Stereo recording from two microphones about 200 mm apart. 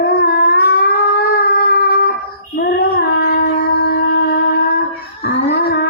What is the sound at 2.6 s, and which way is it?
Child singing, 50° left (ahead or behind).